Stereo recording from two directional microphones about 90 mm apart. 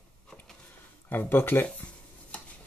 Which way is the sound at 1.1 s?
25° left (ahead or behind).